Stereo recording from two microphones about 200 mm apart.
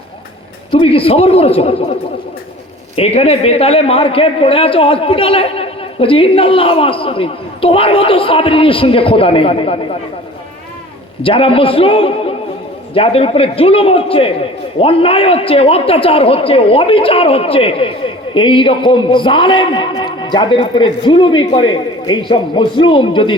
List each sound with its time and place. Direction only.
0.7 s a man's voice: 30° left (ahead or behind)
11.2 s a man's voice: 25° left (ahead or behind)